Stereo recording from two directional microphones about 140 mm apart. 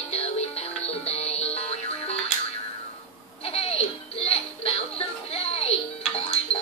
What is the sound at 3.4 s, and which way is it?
Music, 45° left (ahead or behind).